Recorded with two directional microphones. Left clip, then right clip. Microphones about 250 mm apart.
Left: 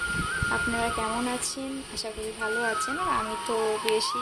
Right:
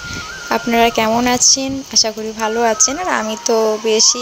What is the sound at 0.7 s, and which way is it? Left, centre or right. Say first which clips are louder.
Speech: right 15 dB; right.